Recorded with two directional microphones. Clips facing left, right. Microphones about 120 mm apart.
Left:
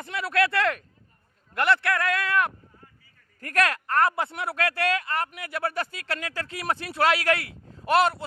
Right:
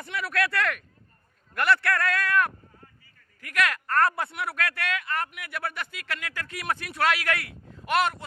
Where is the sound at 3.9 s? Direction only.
20° left (ahead or behind).